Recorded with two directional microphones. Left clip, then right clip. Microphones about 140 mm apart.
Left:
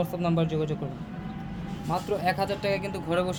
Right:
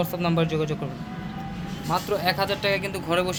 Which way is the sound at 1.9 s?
10° left (ahead or behind).